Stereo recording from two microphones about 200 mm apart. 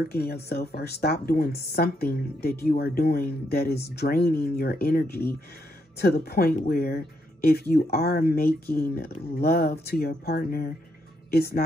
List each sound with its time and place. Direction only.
0.1 s speech: 50° left (ahead or behind)